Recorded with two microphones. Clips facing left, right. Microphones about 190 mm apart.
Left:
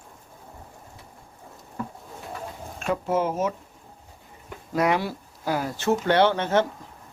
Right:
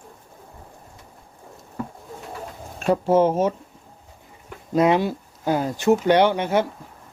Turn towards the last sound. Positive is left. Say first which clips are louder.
# right 2 dB
turn(degrees=-10)  # may be behind; listen again after turning